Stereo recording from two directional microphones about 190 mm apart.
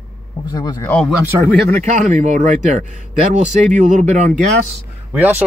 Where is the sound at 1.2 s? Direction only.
10° right (ahead or behind).